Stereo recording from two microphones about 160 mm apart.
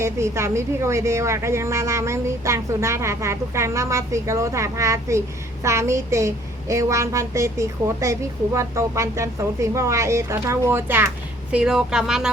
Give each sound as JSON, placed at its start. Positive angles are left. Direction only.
{"t": 0.0, "sound": "a woman's voice", "side_deg": -15}